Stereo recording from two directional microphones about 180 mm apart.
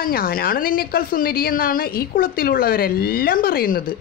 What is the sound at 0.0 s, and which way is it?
A woman's voice, 55° left (ahead or behind).